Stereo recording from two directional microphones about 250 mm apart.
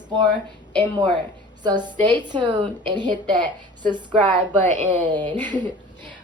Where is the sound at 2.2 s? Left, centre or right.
Centre.